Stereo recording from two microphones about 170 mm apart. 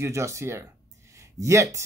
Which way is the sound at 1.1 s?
15° right (ahead or behind).